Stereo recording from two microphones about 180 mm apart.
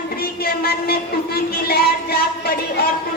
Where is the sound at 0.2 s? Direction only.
55° left (ahead or behind).